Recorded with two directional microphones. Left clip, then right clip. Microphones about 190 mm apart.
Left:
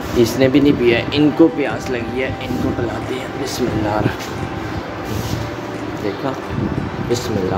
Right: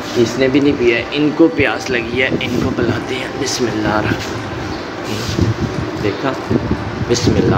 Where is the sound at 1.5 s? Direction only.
5° left (ahead or behind).